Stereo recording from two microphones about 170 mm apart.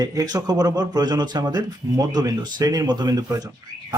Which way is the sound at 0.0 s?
20° right (ahead or behind).